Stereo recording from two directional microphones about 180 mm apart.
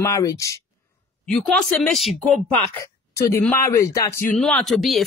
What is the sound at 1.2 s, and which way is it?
Speech, 5° left (ahead or behind).